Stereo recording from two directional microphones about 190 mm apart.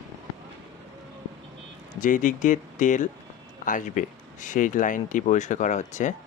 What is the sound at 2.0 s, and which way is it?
Speech, 45° left (ahead or behind).